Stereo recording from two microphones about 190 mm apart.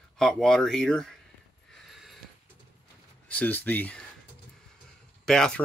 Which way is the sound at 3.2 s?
10° left (ahead or behind).